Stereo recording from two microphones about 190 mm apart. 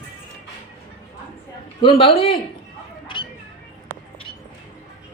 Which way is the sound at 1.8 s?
25° left (ahead or behind).